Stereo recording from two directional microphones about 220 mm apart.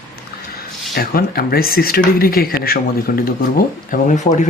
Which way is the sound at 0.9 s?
45° left (ahead or behind).